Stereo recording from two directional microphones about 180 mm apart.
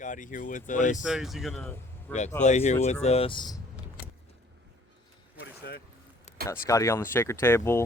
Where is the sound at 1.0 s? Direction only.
Centre (ahead or behind).